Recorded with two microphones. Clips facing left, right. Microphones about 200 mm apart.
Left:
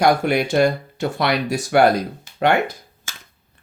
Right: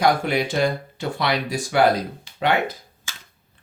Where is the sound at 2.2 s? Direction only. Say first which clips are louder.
Left 5 dB; 50° left (ahead or behind).